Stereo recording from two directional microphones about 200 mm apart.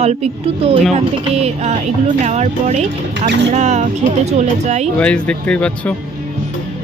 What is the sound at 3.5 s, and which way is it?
Speech, 35° right (ahead or behind).